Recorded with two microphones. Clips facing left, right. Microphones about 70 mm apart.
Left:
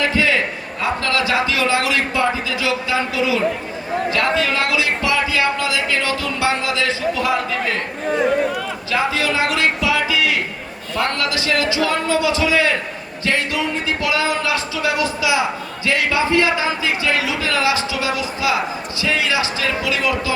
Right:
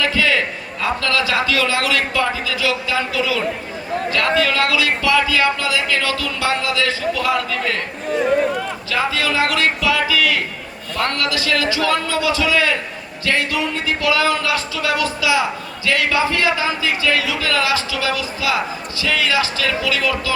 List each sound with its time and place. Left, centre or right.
0.0 s a sound: left
0.8 s speech: left
8.9 s speech: left